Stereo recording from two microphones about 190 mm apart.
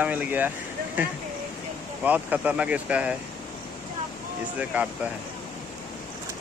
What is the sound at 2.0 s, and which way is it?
Speech, 10° right (ahead or behind).